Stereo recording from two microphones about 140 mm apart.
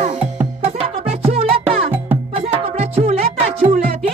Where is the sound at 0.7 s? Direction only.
45° right (ahead or behind).